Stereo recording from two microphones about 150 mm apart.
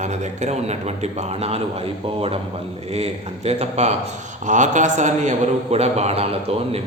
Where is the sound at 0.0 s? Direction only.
50° right (ahead or behind).